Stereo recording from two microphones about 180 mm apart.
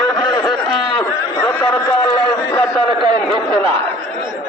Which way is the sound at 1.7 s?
25° left (ahead or behind).